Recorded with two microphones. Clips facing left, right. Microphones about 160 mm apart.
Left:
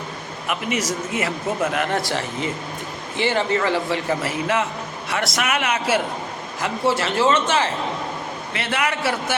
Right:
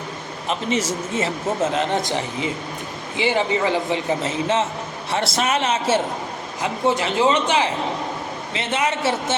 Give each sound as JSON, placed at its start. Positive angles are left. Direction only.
{"t": 0.4, "sound": "a man's voice", "side_deg": -25}